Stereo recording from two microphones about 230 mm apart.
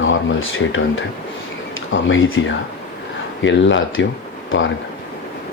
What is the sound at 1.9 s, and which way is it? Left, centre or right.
Speech, left.